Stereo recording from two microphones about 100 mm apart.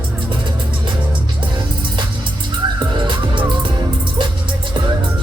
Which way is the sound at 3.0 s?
55° right (ahead or behind).